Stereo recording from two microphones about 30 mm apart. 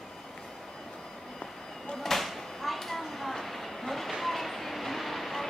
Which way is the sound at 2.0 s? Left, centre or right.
Centre.